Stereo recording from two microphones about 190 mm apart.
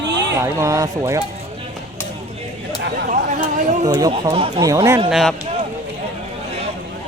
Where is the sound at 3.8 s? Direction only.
20° right (ahead or behind).